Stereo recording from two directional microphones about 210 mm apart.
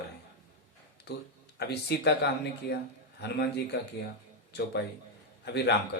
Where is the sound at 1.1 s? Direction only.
55° left (ahead or behind).